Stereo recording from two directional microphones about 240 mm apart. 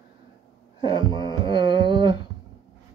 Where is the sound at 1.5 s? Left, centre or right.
Centre.